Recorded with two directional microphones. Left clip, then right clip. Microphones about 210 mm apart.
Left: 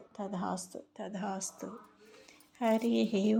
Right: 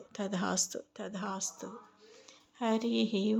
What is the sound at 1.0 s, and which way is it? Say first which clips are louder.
Mantra: left 1 dB; 5° right (ahead or behind).